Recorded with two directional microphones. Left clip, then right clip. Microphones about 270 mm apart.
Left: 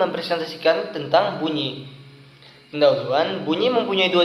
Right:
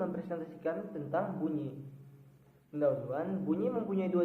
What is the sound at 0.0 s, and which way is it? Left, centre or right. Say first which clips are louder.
A man's voice: left 16 dB; centre.